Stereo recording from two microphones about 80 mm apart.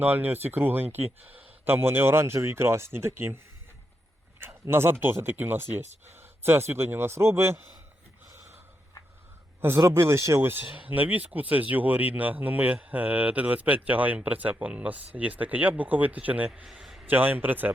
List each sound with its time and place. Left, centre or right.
0.0 s speech: right
4.7 s speech: right
9.6 s speech: right